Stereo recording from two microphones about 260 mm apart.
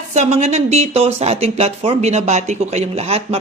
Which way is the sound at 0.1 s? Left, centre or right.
Right.